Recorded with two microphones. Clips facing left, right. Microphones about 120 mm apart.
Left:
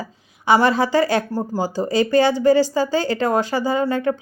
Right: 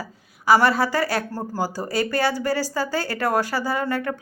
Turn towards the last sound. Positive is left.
turn(degrees=25)  # may be behind; listen again after turning